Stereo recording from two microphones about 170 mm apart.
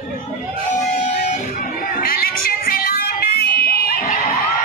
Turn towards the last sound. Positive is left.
turn(degrees=60)  # may be behind; listen again after turning